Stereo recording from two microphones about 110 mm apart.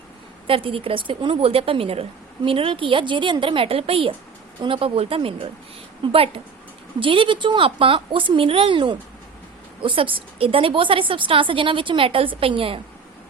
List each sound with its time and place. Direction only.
0.4 s a woman's voice: 55° right (ahead or behind)